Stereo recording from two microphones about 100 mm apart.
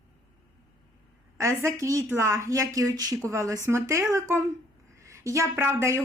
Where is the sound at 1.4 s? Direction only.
30° right (ahead or behind).